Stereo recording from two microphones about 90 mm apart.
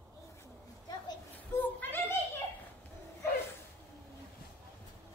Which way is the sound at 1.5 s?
20° left (ahead or behind).